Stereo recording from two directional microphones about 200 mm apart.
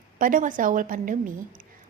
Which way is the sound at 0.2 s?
40° right (ahead or behind).